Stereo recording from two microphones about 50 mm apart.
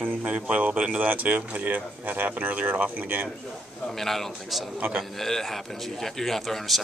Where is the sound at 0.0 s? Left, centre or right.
Right.